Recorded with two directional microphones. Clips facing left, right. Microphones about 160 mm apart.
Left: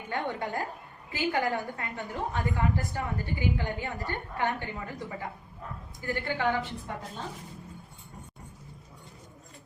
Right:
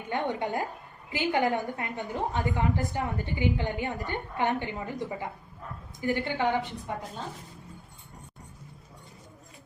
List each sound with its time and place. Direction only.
0.1 s a woman's voice: 20° right (ahead or behind)